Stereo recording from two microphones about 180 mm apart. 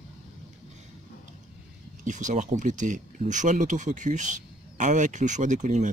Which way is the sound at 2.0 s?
45° right (ahead or behind).